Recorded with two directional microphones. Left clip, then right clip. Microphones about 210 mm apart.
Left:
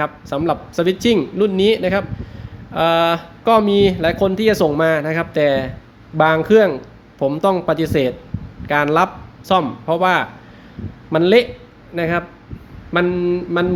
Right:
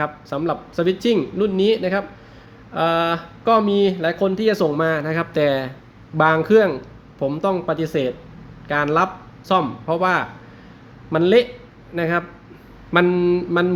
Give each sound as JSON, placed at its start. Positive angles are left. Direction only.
{"t": 0.0, "sound": "speech", "side_deg": 10}
{"t": 6.1, "sound": "mantra", "side_deg": 5}
{"t": 7.2, "sound": "speech", "side_deg": 15}
{"t": 11.9, "sound": "mantra", "side_deg": 5}